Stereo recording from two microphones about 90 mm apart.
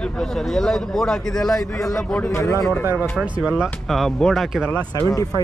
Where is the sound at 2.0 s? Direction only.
15° left (ahead or behind).